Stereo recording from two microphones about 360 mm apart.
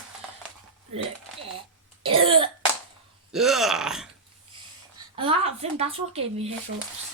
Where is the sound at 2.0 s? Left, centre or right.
Centre.